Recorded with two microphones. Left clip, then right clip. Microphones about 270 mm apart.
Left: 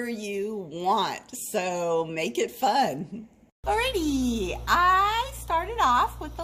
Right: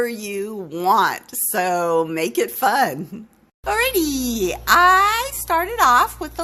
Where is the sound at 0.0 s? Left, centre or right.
Right.